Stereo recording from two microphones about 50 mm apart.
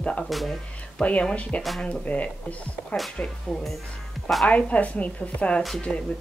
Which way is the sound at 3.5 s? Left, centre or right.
Centre.